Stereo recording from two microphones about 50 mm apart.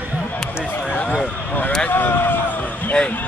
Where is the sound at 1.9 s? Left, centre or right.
Left.